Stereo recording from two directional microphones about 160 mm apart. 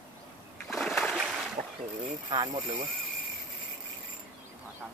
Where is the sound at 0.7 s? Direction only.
Centre (ahead or behind).